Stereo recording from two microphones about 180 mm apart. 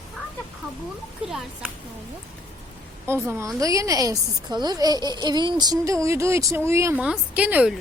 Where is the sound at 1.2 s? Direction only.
Centre (ahead or behind).